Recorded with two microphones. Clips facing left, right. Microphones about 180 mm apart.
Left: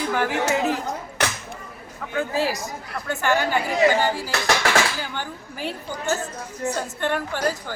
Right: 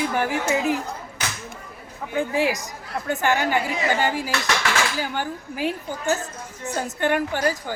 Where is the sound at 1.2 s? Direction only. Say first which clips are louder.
Left 7 dB; 70° left (ahead or behind).